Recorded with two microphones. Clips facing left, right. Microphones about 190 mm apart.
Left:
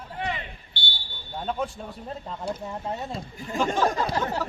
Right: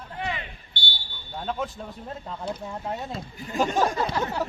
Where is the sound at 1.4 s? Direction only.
Centre (ahead or behind).